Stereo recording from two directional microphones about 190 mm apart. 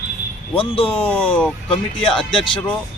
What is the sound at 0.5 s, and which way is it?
Speech, 30° left (ahead or behind).